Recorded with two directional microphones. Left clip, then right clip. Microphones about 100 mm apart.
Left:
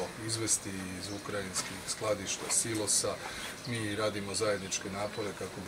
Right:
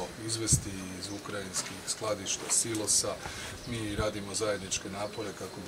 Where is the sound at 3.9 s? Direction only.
10° right (ahead or behind).